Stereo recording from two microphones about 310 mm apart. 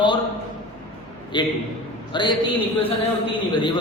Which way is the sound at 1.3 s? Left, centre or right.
Centre.